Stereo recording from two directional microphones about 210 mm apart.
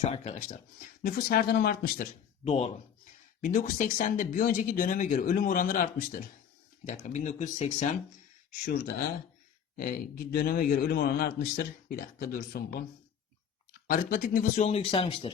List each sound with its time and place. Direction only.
0.0 s speech: 30° left (ahead or behind); by 2.0 s 45° left (ahead or behind)
2.4 s speech: 30° left (ahead or behind)
8.6 s a man's voice: 45° left (ahead or behind)
13.8 s speech: 40° left (ahead or behind); by 15.3 s 25° left (ahead or behind)